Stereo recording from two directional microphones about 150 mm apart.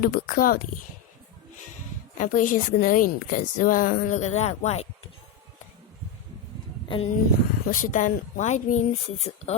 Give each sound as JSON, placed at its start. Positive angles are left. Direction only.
{"t": 0.0, "sound": "speech", "side_deg": 70}
{"t": 2.1, "sound": "a woman's voice", "side_deg": 65}
{"t": 6.8, "sound": "speech", "side_deg": 35}
{"t": 7.7, "sound": "speech", "side_deg": 60}